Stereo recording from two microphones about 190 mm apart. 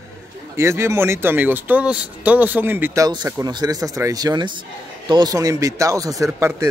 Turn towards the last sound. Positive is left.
turn(degrees=-15)  # may be behind; listen again after turning